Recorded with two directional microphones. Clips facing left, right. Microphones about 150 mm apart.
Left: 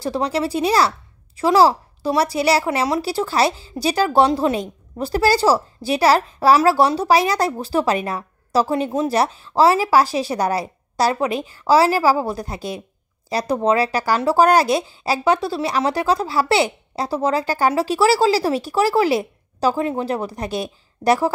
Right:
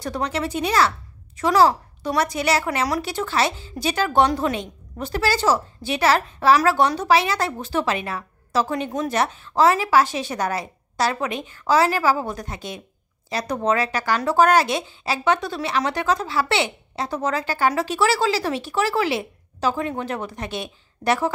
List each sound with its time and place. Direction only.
0.0 s a woman's voice: 30° left (ahead or behind)